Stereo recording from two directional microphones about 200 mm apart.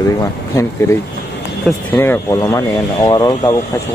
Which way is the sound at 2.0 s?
10° left (ahead or behind).